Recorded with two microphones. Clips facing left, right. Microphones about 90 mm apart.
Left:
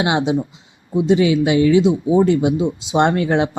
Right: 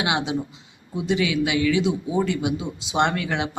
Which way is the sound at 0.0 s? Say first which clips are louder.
Left 6 dB; 25° left (ahead or behind).